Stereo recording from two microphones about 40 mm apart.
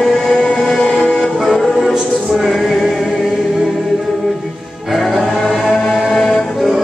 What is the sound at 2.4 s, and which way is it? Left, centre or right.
Choir, centre.